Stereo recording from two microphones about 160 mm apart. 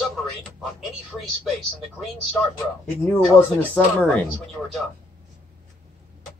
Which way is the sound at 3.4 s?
10° left (ahead or behind).